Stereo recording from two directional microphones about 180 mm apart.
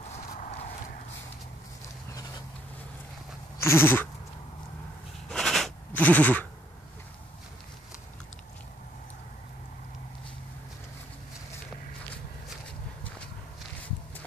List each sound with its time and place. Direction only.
0.3 s horse: 40° left (ahead or behind)
3.6 s bleat: 10° left (ahead or behind)
5.3 s sheep: 5° left (ahead or behind)